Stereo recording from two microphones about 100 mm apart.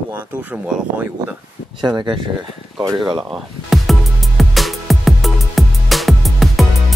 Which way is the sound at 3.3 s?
Centre (ahead or behind).